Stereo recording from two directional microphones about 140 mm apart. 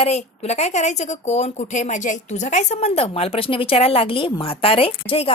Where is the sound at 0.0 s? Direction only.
50° left (ahead or behind).